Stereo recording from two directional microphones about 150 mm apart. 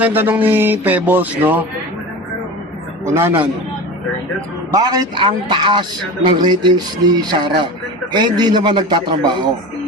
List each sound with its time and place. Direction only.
0.0 s speech: 10° right (ahead or behind)
3.1 s speech: 15° right (ahead or behind)
4.7 s speech: 25° right (ahead or behind)